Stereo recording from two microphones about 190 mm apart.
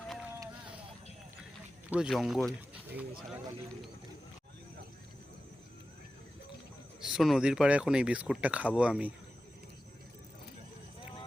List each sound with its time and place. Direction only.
1.9 s speech: centre (ahead or behind)
7.0 s speech: centre (ahead or behind)